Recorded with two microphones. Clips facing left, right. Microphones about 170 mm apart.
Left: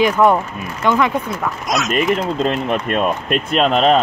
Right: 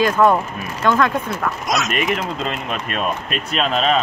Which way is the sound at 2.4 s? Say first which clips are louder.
Left 6 dB; 55° left (ahead or behind).